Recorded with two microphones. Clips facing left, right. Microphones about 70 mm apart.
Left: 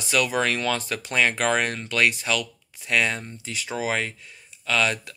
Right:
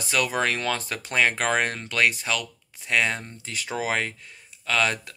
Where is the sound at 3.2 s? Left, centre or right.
Right.